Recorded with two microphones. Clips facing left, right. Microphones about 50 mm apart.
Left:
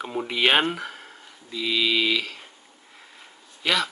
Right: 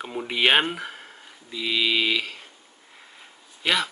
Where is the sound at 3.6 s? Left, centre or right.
Centre.